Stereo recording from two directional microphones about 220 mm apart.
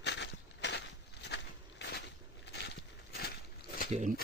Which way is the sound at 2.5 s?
50° left (ahead or behind).